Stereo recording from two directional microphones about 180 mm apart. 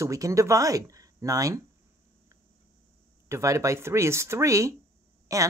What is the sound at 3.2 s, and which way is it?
Speech, 15° right (ahead or behind).